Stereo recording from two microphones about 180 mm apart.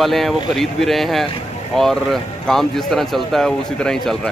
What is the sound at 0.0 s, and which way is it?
A man's voice, centre (ahead or behind).